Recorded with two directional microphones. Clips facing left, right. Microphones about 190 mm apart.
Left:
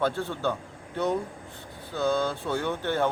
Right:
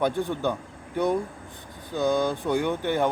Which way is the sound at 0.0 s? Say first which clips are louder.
Right 2 dB; 15° right (ahead or behind).